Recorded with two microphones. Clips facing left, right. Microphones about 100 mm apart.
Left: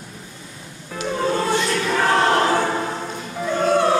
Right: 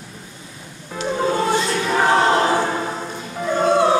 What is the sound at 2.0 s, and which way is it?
Choir, 20° right (ahead or behind).